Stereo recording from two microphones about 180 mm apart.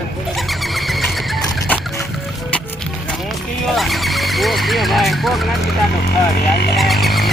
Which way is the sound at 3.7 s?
Centre (ahead or behind).